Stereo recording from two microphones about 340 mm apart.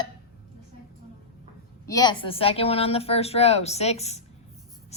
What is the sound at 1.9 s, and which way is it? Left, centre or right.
A woman's voice, centre.